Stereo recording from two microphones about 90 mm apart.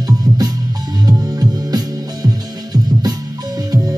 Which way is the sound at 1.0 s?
40° right (ahead or behind).